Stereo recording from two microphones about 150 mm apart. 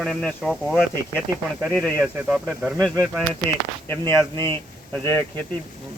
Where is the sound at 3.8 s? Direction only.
20° left (ahead or behind).